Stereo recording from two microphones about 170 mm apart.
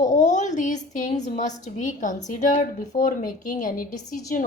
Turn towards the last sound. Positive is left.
turn(degrees=50)  # may be behind; listen again after turning